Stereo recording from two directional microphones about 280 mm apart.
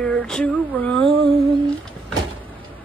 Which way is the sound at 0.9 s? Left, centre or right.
Centre.